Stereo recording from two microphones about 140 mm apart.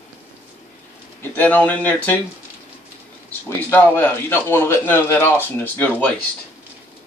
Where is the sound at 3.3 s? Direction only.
15° left (ahead or behind).